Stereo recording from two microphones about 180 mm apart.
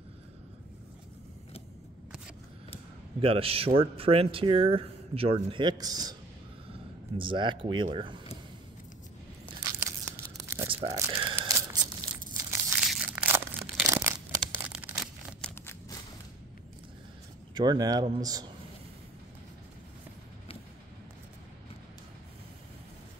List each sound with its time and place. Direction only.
3.2 s speech: 30° right (ahead or behind)
7.2 s speech: 25° right (ahead or behind)
9.7 s tearing: 15° right (ahead or behind)
10.7 s tearing: 30° right (ahead or behind)
11.0 s tearing: 15° right (ahead or behind)
12.4 s crumpling: 15° right (ahead or behind)
15.4 s a sound: 15° left (ahead or behind)
17.6 s speech: 20° right (ahead or behind)